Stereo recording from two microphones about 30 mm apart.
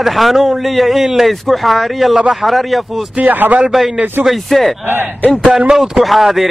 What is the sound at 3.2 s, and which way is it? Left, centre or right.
Speech, right.